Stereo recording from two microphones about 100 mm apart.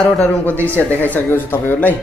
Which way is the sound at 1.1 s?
20° left (ahead or behind).